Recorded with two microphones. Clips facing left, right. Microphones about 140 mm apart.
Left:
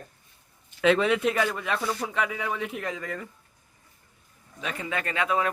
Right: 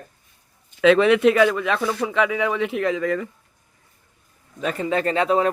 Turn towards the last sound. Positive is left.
turn(degrees=-30)  # may be behind; listen again after turning